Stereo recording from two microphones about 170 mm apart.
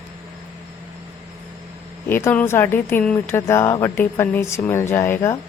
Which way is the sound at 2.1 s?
10° left (ahead or behind).